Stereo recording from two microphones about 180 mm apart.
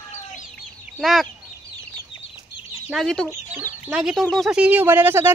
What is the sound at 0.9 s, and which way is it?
Speech, centre (ahead or behind).